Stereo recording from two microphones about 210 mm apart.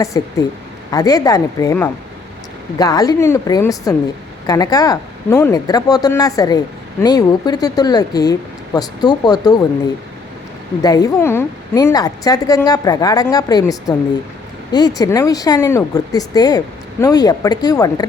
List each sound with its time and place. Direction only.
0.1 s speech: 15° left (ahead or behind)
10.8 s speech: 15° left (ahead or behind)